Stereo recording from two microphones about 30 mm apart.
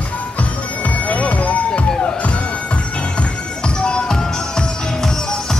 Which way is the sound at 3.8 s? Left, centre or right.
Left.